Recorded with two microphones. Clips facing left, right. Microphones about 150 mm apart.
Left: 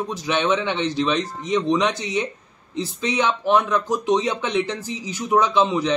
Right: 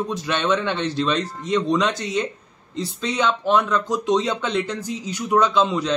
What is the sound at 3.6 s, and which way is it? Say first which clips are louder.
Speech: even; 20° left (ahead or behind).